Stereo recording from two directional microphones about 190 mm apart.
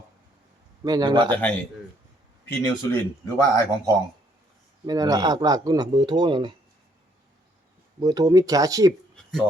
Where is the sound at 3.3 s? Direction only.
15° left (ahead or behind).